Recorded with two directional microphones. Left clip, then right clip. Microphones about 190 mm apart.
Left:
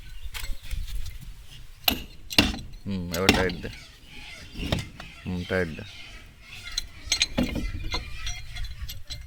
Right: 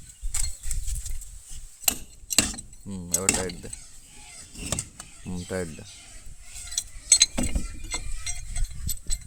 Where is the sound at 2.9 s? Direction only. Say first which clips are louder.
Left 1 dB; 20° right (ahead or behind).